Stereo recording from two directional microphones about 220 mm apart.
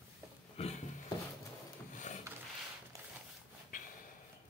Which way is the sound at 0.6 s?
30° left (ahead or behind).